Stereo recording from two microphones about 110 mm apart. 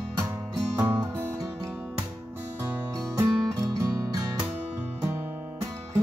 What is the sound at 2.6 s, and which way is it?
Music, 20° right (ahead or behind).